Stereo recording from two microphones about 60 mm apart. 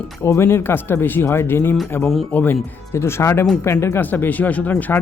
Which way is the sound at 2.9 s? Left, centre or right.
Left.